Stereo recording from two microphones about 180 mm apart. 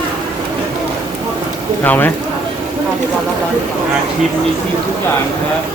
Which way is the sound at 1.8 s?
10° left (ahead or behind).